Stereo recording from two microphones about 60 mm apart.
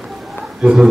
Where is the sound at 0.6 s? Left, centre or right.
Centre.